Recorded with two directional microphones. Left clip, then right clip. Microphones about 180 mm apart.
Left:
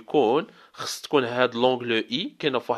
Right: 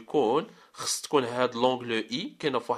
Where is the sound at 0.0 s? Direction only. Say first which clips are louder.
Left 4 dB; 30° left (ahead or behind).